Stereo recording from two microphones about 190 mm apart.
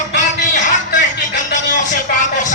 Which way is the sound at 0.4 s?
40° left (ahead or behind).